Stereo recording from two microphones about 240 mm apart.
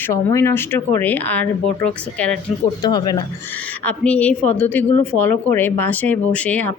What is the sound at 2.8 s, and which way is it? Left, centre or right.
Speech, centre.